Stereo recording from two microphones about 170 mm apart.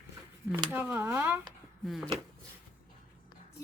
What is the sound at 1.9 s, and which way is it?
Speech, centre (ahead or behind).